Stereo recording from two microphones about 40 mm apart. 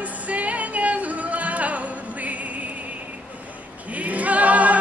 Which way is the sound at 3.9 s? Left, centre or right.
Right.